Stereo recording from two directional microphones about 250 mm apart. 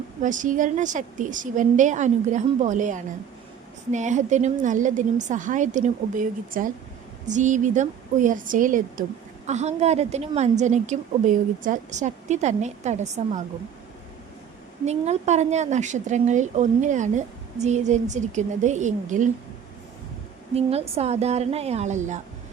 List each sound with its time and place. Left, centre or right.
0.2 s a woman's voice: right
14.8 s speech: right
20.6 s speech: right